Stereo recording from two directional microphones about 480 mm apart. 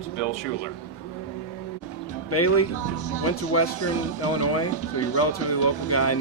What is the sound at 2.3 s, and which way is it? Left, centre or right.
Speech, left.